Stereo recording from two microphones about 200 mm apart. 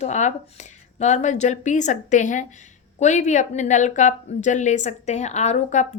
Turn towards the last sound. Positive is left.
turn(degrees=35)  # may be behind; listen again after turning